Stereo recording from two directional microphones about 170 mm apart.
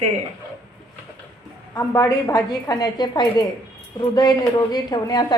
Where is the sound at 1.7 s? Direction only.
20° left (ahead or behind).